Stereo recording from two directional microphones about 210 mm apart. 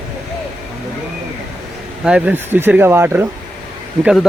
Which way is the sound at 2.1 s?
5° right (ahead or behind).